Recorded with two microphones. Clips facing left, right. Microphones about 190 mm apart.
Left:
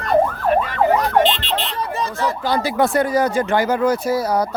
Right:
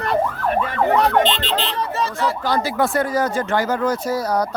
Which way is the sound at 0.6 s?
65° right (ahead or behind).